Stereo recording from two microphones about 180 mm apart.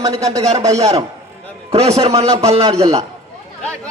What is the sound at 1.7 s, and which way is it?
Speech, 35° right (ahead or behind).